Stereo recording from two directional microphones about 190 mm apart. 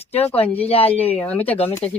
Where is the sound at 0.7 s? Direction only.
30° left (ahead or behind).